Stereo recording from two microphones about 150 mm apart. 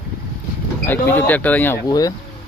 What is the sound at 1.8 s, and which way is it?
Speech, 25° left (ahead or behind).